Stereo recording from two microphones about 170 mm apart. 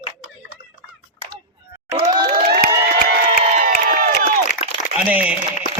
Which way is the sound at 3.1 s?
55° right (ahead or behind).